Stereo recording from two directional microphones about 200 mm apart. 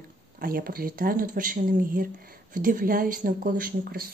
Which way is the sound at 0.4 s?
45° right (ahead or behind).